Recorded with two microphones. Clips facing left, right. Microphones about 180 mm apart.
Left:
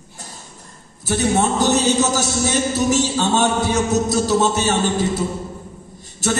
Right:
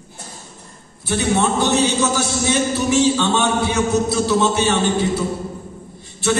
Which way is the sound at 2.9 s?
40° left (ahead or behind).